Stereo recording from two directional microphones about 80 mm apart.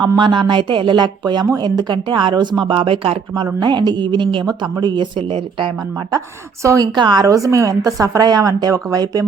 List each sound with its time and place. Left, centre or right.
0.2 s a woman's voice: right
3.4 s a woman's voice: right
4.4 s speech: right
6.1 s a woman's voice: right
6.9 s a woman's voice: right
7.3 s a woman's voice: right